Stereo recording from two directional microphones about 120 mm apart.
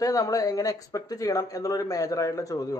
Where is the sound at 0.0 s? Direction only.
30° left (ahead or behind).